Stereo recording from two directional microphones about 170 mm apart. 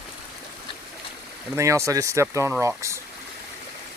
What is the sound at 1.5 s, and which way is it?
Speech, 15° right (ahead or behind).